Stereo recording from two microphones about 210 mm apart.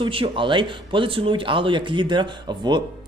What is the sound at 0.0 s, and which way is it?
Speech, 25° right (ahead or behind).